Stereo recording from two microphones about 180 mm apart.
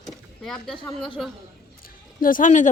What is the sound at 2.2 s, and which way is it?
Speech, 45° left (ahead or behind).